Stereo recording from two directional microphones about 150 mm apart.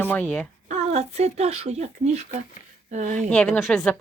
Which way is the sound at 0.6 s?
50° right (ahead or behind).